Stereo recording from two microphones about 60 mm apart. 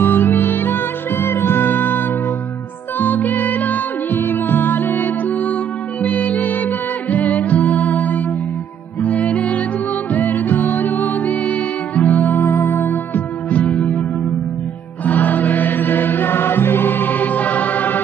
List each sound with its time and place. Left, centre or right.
0.0 s music: left
9.3 s music: left
15.0 s music: left